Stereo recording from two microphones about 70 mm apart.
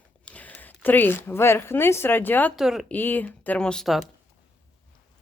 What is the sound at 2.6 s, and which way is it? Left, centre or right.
Speech, centre.